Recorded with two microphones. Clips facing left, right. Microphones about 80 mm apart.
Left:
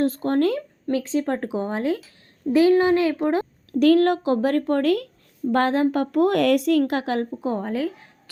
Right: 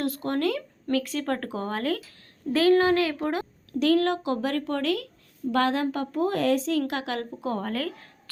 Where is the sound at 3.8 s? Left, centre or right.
Left.